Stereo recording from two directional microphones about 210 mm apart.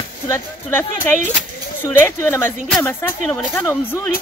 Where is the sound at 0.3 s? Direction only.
10° left (ahead or behind).